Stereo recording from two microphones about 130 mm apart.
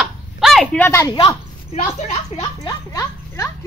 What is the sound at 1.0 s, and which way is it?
Speech, 35° left (ahead or behind).